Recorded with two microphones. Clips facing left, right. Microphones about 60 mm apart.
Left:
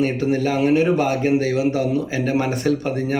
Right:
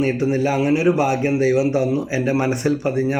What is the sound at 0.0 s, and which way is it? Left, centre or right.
Speech, centre.